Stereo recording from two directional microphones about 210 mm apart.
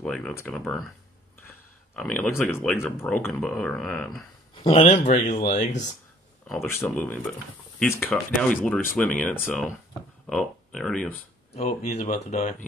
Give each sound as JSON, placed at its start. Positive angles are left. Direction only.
{"t": 0.0, "sound": "speech", "side_deg": 5}
{"t": 2.0, "sound": "speech", "side_deg": 5}
{"t": 4.6, "sound": "speech", "side_deg": 25}
{"t": 6.6, "sound": "speech", "side_deg": 10}
{"t": 11.5, "sound": "speech", "side_deg": 35}